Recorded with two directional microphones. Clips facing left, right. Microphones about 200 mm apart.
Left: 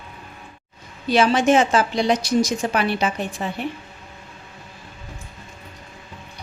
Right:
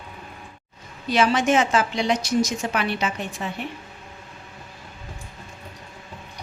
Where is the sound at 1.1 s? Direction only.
30° left (ahead or behind).